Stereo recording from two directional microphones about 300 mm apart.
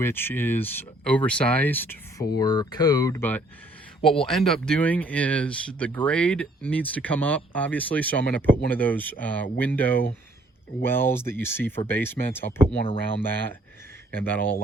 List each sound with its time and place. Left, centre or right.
0.0 s speech: centre
14.1 s speech: centre